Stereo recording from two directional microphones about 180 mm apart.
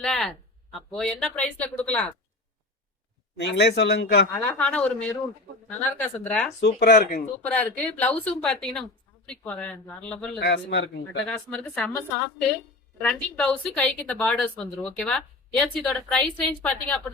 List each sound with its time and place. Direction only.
0.0 s a sound: centre (ahead or behind)
0.9 s a woman's voice: centre (ahead or behind)
3.3 s speech: 70° left (ahead or behind)
4.3 s speech: 5° left (ahead or behind)
6.6 s speech: 65° left (ahead or behind)
7.4 s speech: 10° left (ahead or behind)
10.4 s speech: 75° left (ahead or behind)
11.3 s a woman's voice: 5° left (ahead or behind)
13.0 s a woman's voice: 5° left (ahead or behind)